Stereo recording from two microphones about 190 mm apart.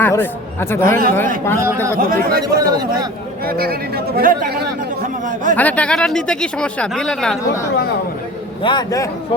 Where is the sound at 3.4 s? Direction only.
50° right (ahead or behind).